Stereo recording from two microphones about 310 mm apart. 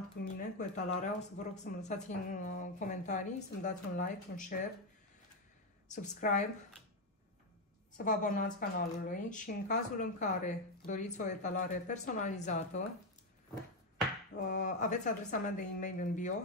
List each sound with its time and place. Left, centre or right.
0.2 s speech: left
5.9 s speech: left
8.0 s speech: left
14.3 s speech: left